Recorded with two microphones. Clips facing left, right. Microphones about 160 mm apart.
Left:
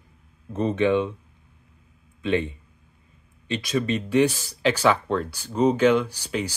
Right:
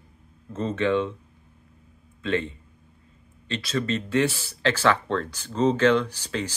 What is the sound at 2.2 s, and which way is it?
Speech, 15° left (ahead or behind).